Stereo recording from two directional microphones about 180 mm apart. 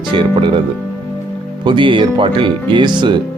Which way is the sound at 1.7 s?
30° right (ahead or behind).